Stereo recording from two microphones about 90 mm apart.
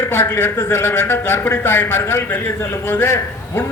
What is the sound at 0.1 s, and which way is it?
A man's voice, 25° left (ahead or behind).